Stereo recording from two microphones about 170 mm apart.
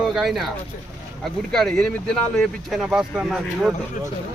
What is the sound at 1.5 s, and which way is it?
Speech, centre (ahead or behind).